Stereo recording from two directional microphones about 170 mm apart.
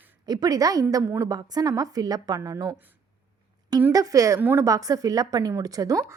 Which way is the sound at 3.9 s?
20° right (ahead or behind).